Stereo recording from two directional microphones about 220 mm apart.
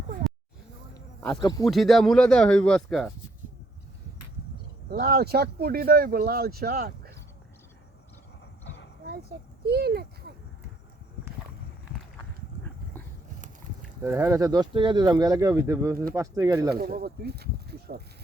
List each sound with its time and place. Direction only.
0.9 s a sound: 5° left (ahead or behind)
1.4 s speech: 15° left (ahead or behind)
1.6 s speech: centre (ahead or behind)
4.9 s speech: 45° right (ahead or behind)
9.6 s speech: 45° right (ahead or behind)
14.0 s speech: 10° right (ahead or behind)
16.7 s speech: 45° right (ahead or behind)